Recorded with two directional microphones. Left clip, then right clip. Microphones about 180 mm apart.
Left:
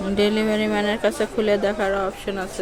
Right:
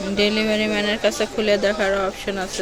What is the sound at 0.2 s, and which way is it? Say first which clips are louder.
Speech: right 1 dB; 20° left (ahead or behind).